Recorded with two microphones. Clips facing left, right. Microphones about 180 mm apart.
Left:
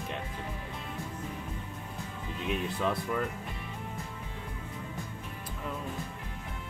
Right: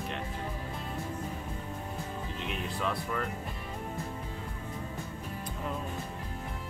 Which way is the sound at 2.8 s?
15° left (ahead or behind).